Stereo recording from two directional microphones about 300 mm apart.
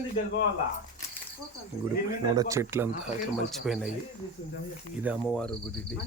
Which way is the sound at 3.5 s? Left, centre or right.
Centre.